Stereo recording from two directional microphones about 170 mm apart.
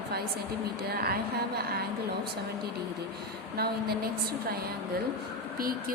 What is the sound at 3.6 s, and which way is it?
Speech, 65° right (ahead or behind).